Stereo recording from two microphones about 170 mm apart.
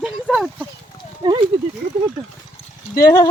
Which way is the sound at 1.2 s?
30° right (ahead or behind).